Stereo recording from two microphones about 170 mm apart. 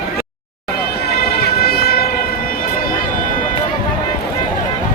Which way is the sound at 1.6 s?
65° left (ahead or behind).